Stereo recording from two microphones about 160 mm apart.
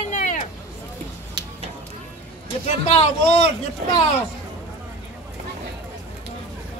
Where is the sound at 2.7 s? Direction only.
40° left (ahead or behind).